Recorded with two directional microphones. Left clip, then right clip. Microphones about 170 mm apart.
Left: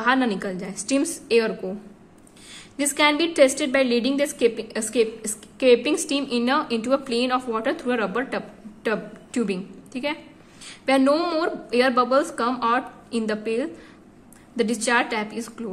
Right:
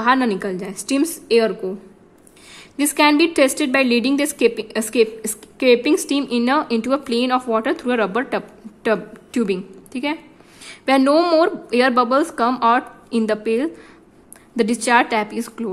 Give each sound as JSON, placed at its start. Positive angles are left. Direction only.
{"t": 0.0, "sound": "a woman's voice", "side_deg": -35}
{"t": 2.5, "sound": "a woman's voice", "side_deg": -40}